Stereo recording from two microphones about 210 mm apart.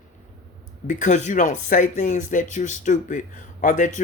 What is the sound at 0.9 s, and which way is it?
Speech, 35° left (ahead or behind).